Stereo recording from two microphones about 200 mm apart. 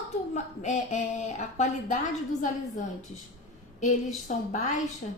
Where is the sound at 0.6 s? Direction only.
35° left (ahead or behind).